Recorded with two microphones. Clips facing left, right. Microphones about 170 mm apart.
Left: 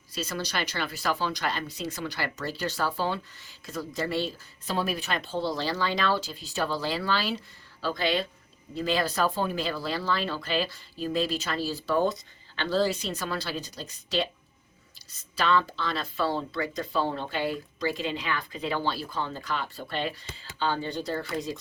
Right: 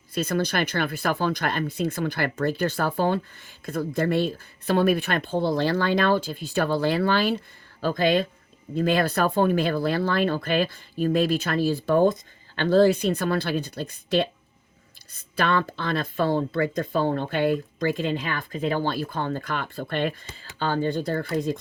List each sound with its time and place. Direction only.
0.1 s speech: 55° right (ahead or behind)